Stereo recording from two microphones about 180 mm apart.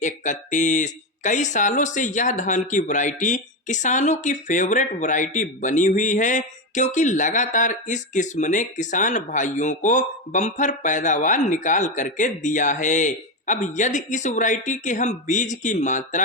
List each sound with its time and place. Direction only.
0.0 s speech: 45° left (ahead or behind)